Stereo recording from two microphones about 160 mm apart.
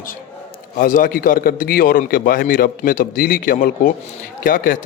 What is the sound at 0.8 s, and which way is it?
Speech, 60° left (ahead or behind).